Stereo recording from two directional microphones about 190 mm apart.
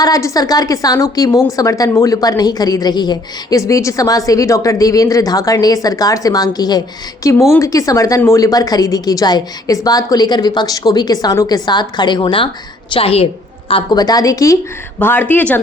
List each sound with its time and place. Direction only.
0.0 s a woman's voice: 15° left (ahead or behind)